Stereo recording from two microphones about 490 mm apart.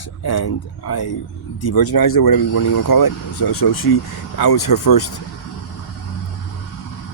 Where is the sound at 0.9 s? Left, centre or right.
Left.